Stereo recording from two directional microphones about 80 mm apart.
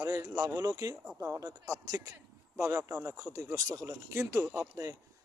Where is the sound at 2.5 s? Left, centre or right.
Right.